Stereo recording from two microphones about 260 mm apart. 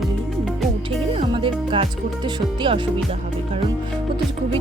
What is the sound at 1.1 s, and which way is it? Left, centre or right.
Music, centre.